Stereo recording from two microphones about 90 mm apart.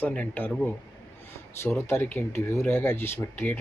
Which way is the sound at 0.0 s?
15° left (ahead or behind).